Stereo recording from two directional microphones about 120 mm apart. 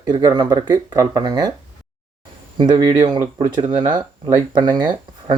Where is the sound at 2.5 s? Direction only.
40° right (ahead or behind).